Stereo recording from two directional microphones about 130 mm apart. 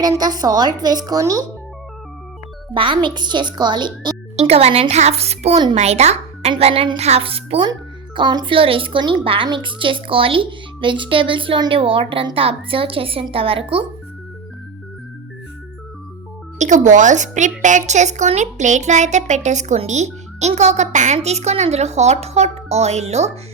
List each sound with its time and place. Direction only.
0.0 s a woman's voice: 30° right (ahead or behind)
2.7 s speech: 40° right (ahead or behind)
4.4 s speech: 55° right (ahead or behind)
7.7 s speech: 35° right (ahead or behind)
16.6 s a woman's voice: 70° right (ahead or behind)